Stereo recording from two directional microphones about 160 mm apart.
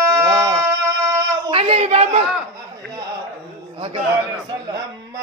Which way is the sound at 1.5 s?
40° right (ahead or behind).